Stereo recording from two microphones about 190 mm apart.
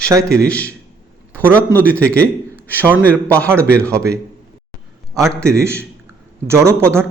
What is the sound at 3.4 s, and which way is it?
Speech, 15° right (ahead or behind).